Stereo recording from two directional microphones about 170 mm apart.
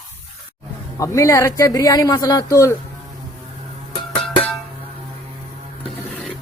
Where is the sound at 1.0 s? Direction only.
20° left (ahead or behind).